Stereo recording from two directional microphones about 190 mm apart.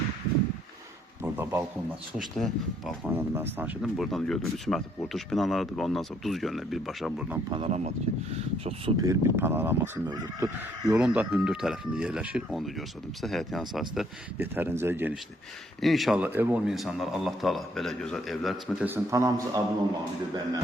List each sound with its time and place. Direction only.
1.2 s a sound: 10° right (ahead or behind)
2.1 s speech: centre (ahead or behind)
3.1 s speech: 10° right (ahead or behind)
7.5 s speech: 35° right (ahead or behind)
9.0 s speech: 15° right (ahead or behind)
10.9 s speech: 5° right (ahead or behind)